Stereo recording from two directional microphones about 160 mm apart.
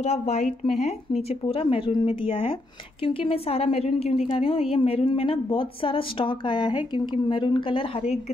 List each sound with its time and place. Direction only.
0.0 s a woman's voice: 45° left (ahead or behind)